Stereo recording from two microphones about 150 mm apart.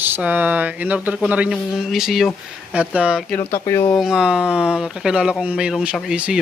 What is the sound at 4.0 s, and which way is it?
Speech, 5° right (ahead or behind).